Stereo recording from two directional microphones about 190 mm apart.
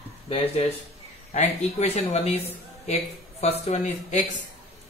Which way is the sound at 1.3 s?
35° left (ahead or behind).